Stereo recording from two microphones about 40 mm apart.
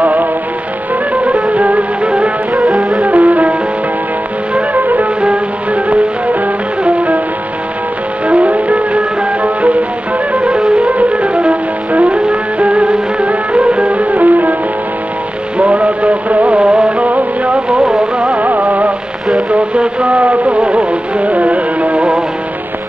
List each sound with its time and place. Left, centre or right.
0.0 s music: right
4.6 s music: right
5.2 s music: right
8.3 s music: right
15.5 s music: right
16.5 s music: right
17.6 s music: right
18.4 s music: right
19.5 s music: right